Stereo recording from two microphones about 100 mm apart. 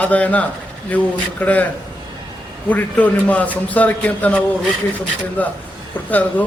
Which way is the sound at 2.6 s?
15° left (ahead or behind).